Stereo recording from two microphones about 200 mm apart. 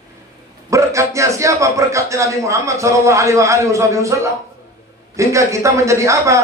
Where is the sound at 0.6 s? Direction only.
15° right (ahead or behind).